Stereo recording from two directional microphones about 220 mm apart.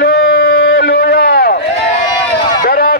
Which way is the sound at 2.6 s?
45° left (ahead or behind).